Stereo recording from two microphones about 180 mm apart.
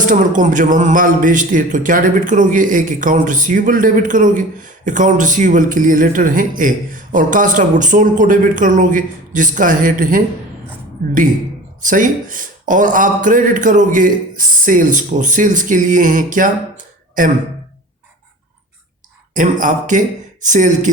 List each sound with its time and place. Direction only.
0.0 s speech: 45° right (ahead or behind)
11.8 s speech: 45° right (ahead or behind)
19.3 s speech: 45° right (ahead or behind)